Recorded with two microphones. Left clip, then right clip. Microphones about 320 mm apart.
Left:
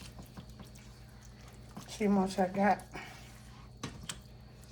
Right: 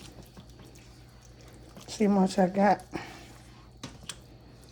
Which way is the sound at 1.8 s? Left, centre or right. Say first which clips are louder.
Right 5 dB; right.